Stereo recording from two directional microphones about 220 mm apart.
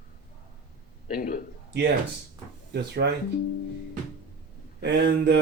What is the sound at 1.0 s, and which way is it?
Speech, 40° left (ahead or behind).